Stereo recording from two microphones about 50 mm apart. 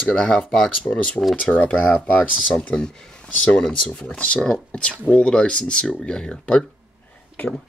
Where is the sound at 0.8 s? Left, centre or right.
Left.